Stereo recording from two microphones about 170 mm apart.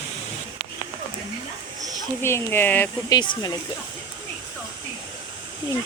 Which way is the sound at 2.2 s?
15° left (ahead or behind).